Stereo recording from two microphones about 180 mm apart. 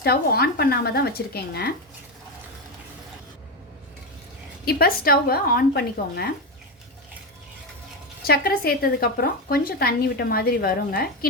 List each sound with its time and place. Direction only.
0.0 s a woman's voice: 55° left (ahead or behind)
4.6 s a woman's voice: 55° left (ahead or behind)
8.3 s a woman's voice: 60° left (ahead or behind)